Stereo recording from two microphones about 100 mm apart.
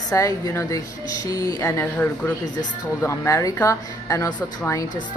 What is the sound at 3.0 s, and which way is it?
A woman's voice, 30° left (ahead or behind).